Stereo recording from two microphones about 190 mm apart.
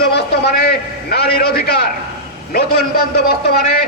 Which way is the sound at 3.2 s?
55° left (ahead or behind).